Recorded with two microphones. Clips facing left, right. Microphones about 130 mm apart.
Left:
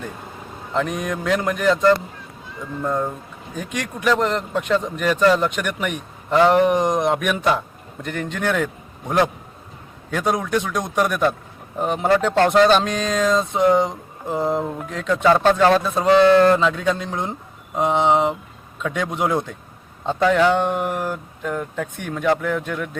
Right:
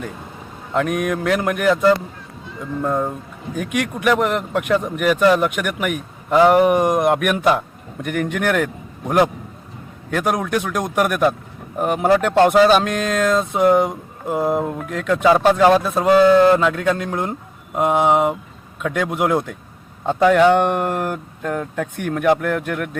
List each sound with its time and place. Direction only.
0.7 s speech: 5° right (ahead or behind)